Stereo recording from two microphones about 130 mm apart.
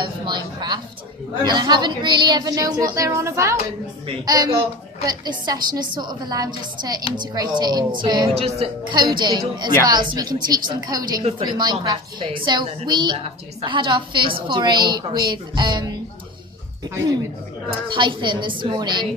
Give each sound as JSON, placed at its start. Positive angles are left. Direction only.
{"t": 0.0, "sound": "a woman's voice", "side_deg": -35}
{"t": 8.4, "sound": "a woman's voice", "side_deg": -50}
{"t": 8.8, "sound": "a woman's voice", "side_deg": -35}
{"t": 17.6, "sound": "a woman's voice", "side_deg": -40}